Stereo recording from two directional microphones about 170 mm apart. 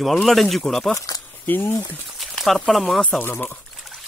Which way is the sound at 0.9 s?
20° left (ahead or behind).